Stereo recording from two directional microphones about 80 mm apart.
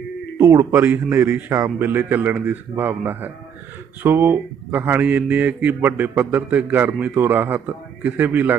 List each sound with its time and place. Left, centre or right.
0.3 s a man's voice: right